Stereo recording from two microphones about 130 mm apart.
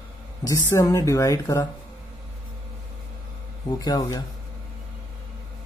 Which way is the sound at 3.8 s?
30° left (ahead or behind).